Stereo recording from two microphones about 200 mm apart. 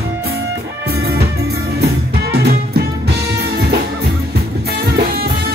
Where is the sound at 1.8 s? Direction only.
50° right (ahead or behind).